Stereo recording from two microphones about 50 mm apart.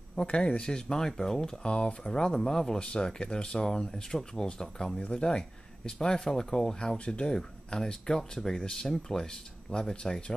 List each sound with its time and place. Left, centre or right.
0.1 s speech: centre